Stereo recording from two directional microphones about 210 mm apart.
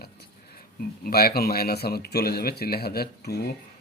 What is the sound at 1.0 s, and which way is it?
Speech, 45° left (ahead or behind).